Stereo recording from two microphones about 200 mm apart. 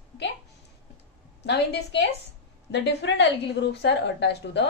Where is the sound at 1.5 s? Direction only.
55° left (ahead or behind).